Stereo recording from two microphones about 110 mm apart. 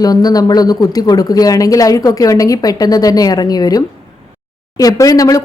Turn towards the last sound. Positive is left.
turn(degrees=30)  # may be behind; listen again after turning